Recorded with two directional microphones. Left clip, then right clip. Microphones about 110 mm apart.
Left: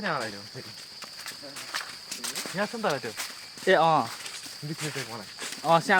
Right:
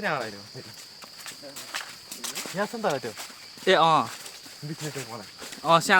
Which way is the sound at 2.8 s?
55° right (ahead or behind).